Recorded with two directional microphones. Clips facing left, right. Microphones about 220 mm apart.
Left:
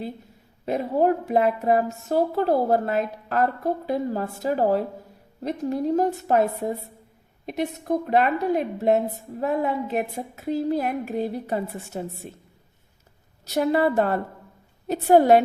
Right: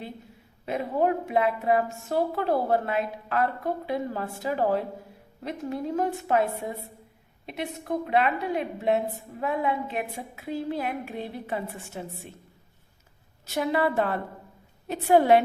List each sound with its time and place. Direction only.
0.6 s speech: 40° left (ahead or behind)
13.4 s speech: 40° left (ahead or behind)